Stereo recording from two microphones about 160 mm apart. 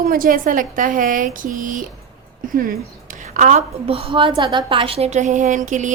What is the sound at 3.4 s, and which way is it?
A woman's voice, 45° right (ahead or behind).